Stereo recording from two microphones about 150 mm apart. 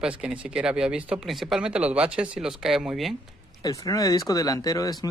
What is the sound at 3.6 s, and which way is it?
Speech, 25° left (ahead or behind).